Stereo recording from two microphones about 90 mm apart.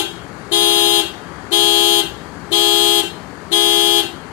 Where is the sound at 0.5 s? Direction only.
35° left (ahead or behind).